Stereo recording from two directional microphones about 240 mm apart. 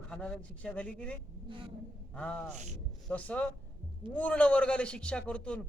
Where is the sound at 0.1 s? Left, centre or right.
Centre.